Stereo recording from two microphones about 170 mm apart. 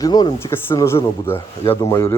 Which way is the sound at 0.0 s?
25° left (ahead or behind).